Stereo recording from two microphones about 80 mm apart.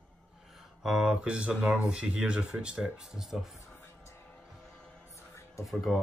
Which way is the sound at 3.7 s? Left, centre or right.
Left.